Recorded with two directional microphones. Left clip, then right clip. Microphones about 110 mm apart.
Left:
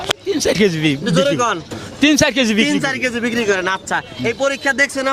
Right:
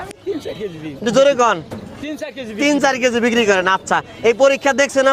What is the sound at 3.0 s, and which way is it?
A man's voice, 90° right.